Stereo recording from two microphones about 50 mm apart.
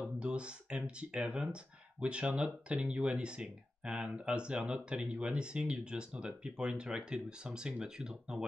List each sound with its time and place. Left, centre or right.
0.0 s speech: right